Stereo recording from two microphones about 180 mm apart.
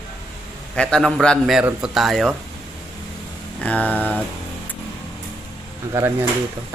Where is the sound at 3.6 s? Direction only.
5° left (ahead or behind).